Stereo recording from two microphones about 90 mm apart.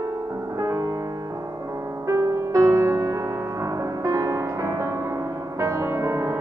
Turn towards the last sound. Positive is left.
turn(degrees=-30)  # may be behind; listen again after turning